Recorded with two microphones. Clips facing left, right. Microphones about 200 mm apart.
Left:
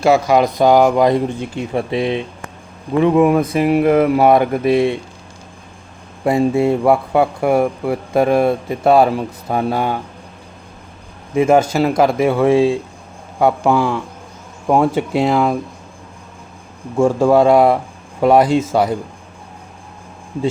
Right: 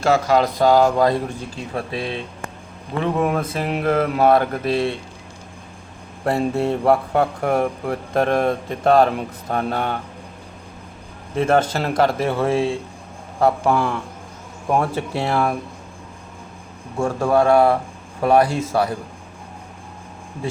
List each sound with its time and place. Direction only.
0.0 s speech: 10° left (ahead or behind)
6.2 s speech: 10° left (ahead or behind)
11.3 s speech: 10° left (ahead or behind)
14.7 s speech: 15° left (ahead or behind)
17.0 s speech: 20° left (ahead or behind)